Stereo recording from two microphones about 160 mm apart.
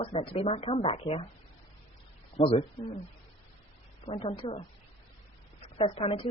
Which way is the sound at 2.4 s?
35° left (ahead or behind).